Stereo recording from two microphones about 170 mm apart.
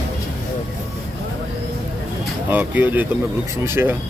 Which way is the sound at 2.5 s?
10° right (ahead or behind).